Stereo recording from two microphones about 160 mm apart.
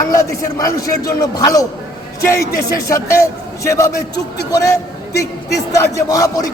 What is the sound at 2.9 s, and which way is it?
A man's voice, 20° left (ahead or behind).